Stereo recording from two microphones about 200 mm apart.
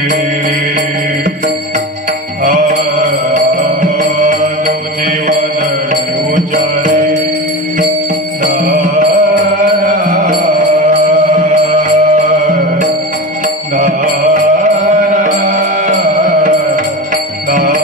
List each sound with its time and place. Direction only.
2.4 s music: 40° right (ahead or behind)
6.3 s music: 40° right (ahead or behind)
8.5 s music: 40° right (ahead or behind)
17.5 s bell: 40° right (ahead or behind)